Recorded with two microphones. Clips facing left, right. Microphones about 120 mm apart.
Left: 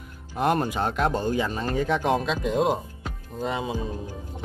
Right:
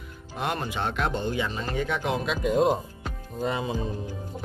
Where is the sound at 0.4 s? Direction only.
40° left (ahead or behind).